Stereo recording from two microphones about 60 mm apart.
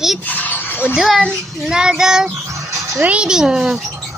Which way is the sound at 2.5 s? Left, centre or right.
Right.